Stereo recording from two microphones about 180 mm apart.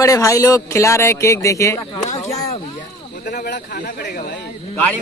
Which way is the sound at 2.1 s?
40° left (ahead or behind).